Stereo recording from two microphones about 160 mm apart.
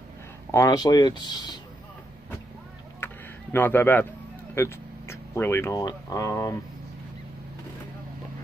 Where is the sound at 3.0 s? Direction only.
15° left (ahead or behind).